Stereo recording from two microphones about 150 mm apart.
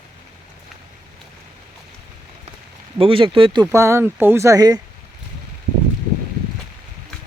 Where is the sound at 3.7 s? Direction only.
20° right (ahead or behind).